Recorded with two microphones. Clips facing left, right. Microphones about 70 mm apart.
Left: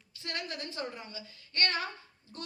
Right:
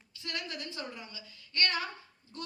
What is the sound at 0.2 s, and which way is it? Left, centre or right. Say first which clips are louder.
A woman's voice: left 1 dB; left.